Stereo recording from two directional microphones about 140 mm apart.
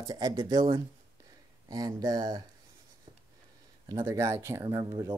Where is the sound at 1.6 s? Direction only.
25° right (ahead or behind).